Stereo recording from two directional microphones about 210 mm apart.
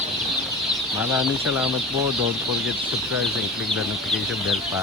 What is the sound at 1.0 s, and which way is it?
Speech, 5° right (ahead or behind).